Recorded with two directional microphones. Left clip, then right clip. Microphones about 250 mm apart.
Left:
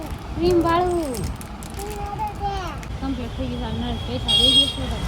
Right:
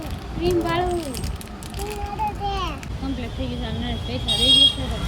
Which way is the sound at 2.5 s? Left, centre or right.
Centre.